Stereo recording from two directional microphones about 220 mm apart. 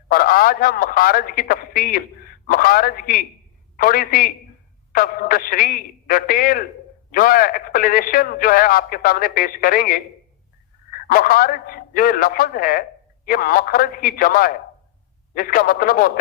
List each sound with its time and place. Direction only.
0.1 s a man's voice: 40° left (ahead or behind)